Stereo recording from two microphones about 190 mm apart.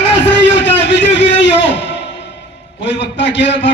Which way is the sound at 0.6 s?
70° left (ahead or behind).